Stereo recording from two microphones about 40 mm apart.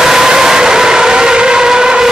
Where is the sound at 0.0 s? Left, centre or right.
Centre.